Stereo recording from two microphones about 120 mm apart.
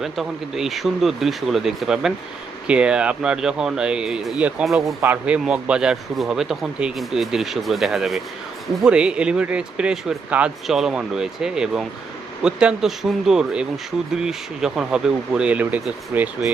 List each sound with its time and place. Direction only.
0.0 s speech: centre (ahead or behind)
4.9 s speech: 15° right (ahead or behind)